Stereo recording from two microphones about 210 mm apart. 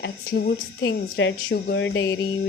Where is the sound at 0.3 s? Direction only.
45° left (ahead or behind).